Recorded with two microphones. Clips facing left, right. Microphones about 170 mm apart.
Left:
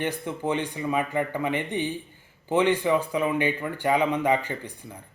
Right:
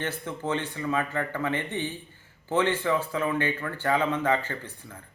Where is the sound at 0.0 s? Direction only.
15° left (ahead or behind).